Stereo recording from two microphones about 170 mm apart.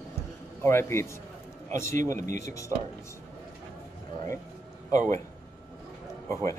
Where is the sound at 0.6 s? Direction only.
15° left (ahead or behind).